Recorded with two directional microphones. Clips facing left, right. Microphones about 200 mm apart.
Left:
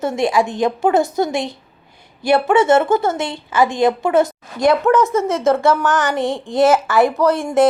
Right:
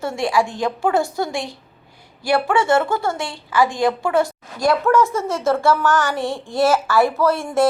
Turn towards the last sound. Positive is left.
turn(degrees=15)  # may be behind; listen again after turning